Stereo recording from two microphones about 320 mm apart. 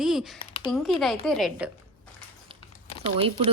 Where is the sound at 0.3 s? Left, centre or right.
Centre.